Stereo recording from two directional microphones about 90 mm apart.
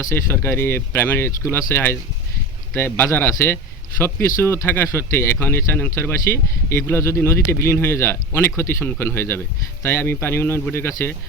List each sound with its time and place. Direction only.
0.0 s speech: 30° left (ahead or behind)